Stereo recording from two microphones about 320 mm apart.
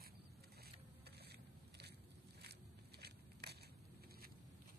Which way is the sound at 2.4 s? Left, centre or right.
Right.